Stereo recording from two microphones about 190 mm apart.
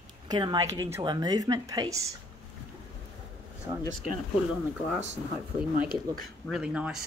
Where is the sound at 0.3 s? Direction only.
20° right (ahead or behind).